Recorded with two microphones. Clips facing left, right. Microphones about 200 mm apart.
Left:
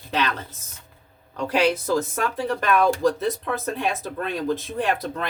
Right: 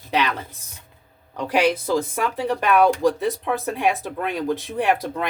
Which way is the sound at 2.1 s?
10° right (ahead or behind).